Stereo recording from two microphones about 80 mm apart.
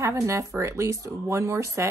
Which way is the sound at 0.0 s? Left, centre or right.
Right.